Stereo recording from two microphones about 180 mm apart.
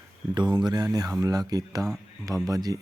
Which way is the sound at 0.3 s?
25° right (ahead or behind).